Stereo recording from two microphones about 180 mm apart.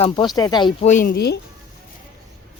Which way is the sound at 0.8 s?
45° left (ahead or behind).